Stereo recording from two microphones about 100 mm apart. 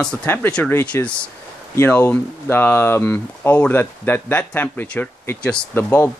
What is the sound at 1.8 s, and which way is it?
Speech, 20° left (ahead or behind).